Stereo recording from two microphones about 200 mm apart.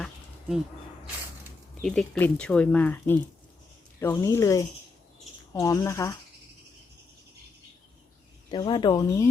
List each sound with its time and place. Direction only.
0.0 s insect: centre (ahead or behind)
1.8 s speech: 5° left (ahead or behind)
8.4 s speech: 25° left (ahead or behind)